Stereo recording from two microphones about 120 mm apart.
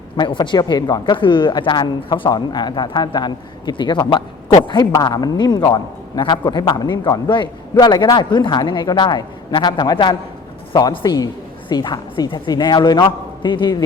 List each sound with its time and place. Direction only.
0.2 s a woman's voice: 40° left (ahead or behind)